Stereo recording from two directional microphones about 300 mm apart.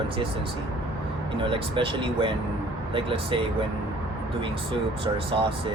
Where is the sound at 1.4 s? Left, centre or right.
Centre.